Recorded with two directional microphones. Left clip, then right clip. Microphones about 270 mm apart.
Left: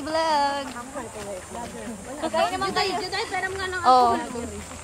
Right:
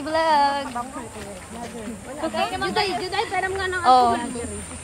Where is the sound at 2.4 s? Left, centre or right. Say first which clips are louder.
Left 2 dB; left.